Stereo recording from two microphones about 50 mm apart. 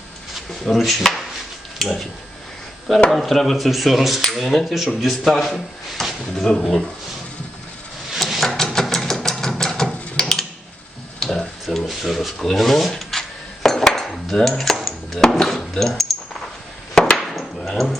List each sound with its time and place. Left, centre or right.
0.3 s speech: centre
3.1 s speech: centre
8.2 s a sound: centre
11.2 s tick-tock: centre
11.9 s dishes: centre
16.9 s chop: centre
17.2 s chop: centre
17.6 s a sound: centre